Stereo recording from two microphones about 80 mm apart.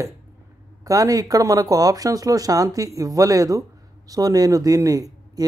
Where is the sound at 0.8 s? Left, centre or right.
Right.